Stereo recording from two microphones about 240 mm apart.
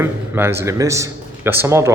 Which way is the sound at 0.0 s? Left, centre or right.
Centre.